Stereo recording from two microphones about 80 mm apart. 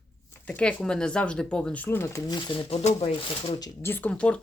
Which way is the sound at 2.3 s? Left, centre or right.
Left.